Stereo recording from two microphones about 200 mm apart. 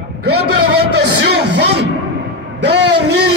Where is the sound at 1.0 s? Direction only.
55° right (ahead or behind).